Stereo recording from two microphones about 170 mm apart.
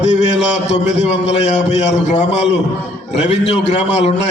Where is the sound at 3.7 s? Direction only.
40° left (ahead or behind).